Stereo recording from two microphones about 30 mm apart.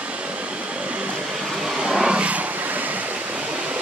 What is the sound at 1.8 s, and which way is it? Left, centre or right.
Vehicle, right.